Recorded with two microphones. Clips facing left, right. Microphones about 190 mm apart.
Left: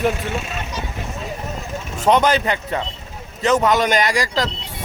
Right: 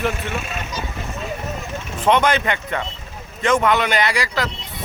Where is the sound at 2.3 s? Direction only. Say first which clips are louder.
Left 2 dB; 35° left (ahead or behind).